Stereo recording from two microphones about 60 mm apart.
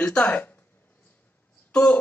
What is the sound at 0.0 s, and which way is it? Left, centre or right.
Speech, left.